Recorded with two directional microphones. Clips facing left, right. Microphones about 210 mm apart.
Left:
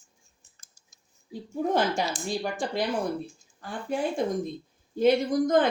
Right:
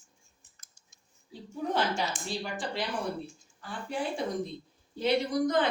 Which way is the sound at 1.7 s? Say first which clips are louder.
Left 3 dB; 50° left (ahead or behind).